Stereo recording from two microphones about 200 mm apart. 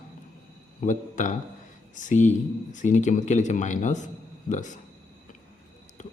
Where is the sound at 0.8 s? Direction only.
40° left (ahead or behind).